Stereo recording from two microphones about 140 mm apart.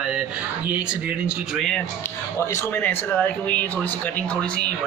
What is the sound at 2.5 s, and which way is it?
Speech, 15° left (ahead or behind).